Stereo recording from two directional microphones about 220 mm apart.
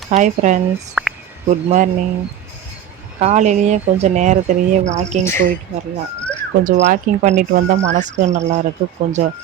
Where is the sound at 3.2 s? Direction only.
30° right (ahead or behind).